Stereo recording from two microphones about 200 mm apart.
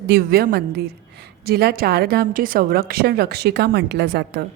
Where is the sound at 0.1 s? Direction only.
50° right (ahead or behind).